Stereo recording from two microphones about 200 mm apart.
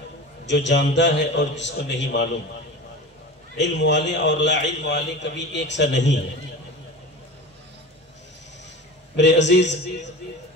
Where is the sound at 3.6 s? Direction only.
60° left (ahead or behind).